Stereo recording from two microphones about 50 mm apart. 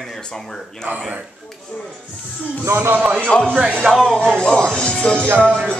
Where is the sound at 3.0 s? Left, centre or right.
Right.